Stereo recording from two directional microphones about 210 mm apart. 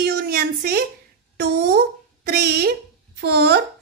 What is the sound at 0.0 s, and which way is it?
A woman's voice, 50° right (ahead or behind).